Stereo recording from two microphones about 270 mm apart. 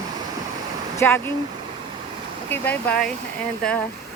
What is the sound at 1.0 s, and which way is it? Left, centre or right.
Speech, centre.